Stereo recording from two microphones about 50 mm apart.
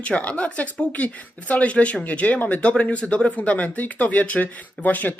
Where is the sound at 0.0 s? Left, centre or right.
Left.